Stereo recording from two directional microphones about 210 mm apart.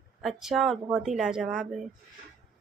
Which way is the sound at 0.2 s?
Centre (ahead or behind).